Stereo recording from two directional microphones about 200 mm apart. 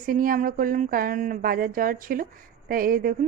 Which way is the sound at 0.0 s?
45° right (ahead or behind).